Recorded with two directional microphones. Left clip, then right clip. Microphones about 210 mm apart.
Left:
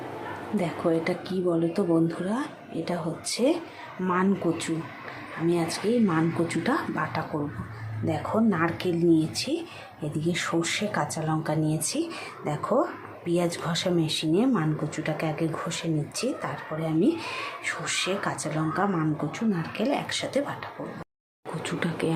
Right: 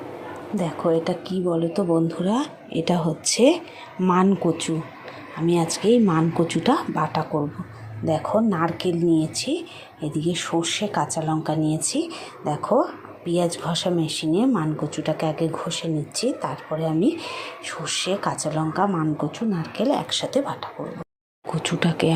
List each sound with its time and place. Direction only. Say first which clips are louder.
0.5 s speech: right 4 dB; 10° right (ahead or behind)
2.2 s speech: right 6 dB; 25° right (ahead or behind)